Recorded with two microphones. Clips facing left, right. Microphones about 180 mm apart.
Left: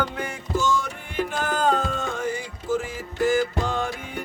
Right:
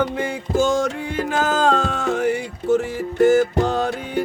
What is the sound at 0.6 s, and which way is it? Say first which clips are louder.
Music: right 7 dB; 85° right.